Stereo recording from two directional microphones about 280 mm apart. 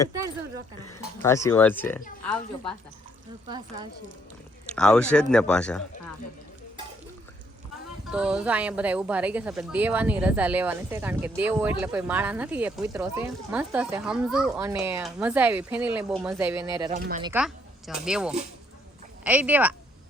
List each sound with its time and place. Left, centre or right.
1.2 s speech: centre
4.7 s a woman's voice: centre
8.1 s a woman's voice: centre
16.9 s speech: right
17.2 s a woman's voice: centre